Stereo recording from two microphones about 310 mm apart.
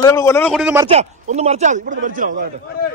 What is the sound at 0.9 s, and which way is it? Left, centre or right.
Speech, right.